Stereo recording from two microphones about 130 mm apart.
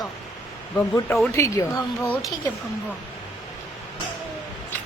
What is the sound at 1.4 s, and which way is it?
Speech, 25° left (ahead or behind).